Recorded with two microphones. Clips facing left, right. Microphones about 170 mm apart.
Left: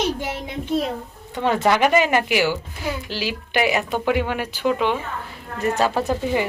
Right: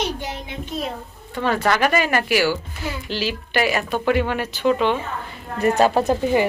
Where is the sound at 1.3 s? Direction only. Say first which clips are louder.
Left 1 dB; 20° left (ahead or behind).